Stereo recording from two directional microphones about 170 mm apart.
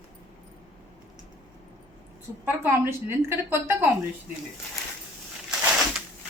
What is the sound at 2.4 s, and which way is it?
Speech, 15° right (ahead or behind).